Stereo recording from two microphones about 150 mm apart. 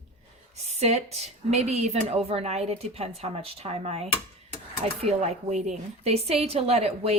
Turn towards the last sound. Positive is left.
turn(degrees=-45)  # may be behind; listen again after turning